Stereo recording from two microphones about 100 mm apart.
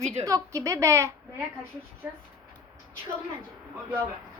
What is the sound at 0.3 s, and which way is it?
Speech, 35° right (ahead or behind).